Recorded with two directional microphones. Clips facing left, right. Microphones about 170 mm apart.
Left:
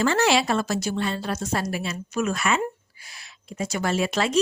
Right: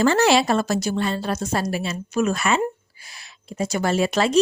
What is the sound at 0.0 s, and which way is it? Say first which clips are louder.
A woman's voice: right 4 dB; 35° right (ahead or behind).